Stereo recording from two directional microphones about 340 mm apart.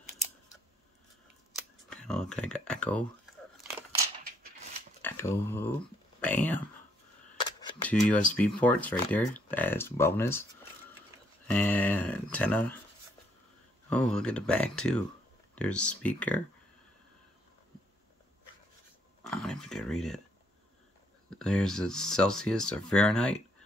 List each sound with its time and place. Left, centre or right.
1.5 s camera: centre
5.0 s speech: centre
11.4 s speech: centre
13.8 s speech: centre
19.2 s a sound: centre
21.3 s speech: centre